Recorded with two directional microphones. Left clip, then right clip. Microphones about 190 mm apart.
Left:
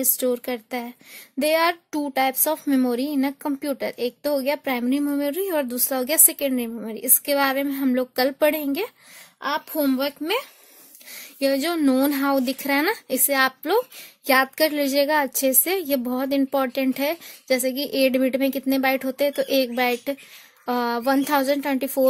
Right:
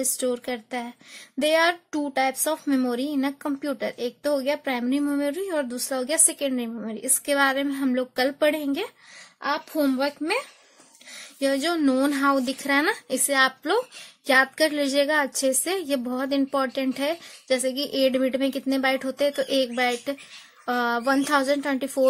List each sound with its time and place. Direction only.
0.0 s child singing: 35° left (ahead or behind)
9.4 s speech: 45° left (ahead or behind)
11.1 s child singing: 35° left (ahead or behind)